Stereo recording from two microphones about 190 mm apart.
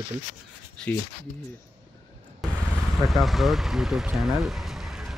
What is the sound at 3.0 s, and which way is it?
Speech, centre (ahead or behind).